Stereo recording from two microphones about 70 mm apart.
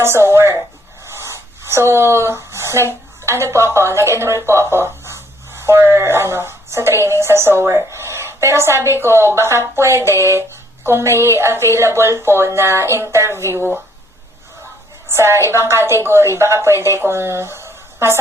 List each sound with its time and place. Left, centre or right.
0.0 s a woman's voice: right
15.1 s a woman's voice: right